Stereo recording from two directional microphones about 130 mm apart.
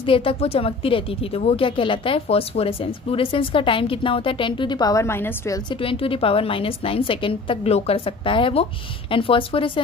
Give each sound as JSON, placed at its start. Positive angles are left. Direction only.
{"t": 0.0, "sound": "speech", "side_deg": 45}
{"t": 5.7, "sound": "speech", "side_deg": 45}